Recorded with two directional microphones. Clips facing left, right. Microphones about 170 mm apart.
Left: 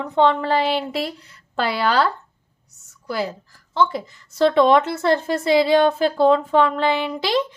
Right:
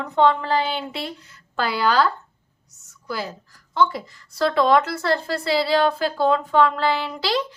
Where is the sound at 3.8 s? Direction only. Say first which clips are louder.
Left 1 dB; 25° left (ahead or behind).